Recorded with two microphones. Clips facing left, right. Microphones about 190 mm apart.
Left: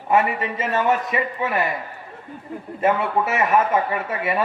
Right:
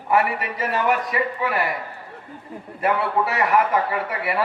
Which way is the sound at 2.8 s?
20° left (ahead or behind).